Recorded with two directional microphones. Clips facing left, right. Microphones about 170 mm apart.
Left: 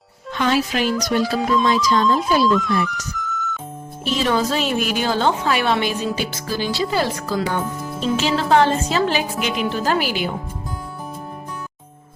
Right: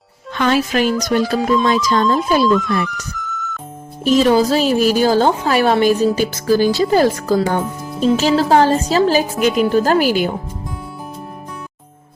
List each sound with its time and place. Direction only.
0.3 s music: 55° right (ahead or behind)
1.6 s speech: 50° right (ahead or behind)
2.5 s speech: centre (ahead or behind)
4.0 s a woman's voice: 35° right (ahead or behind)